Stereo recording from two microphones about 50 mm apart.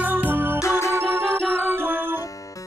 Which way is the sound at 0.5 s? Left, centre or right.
Left.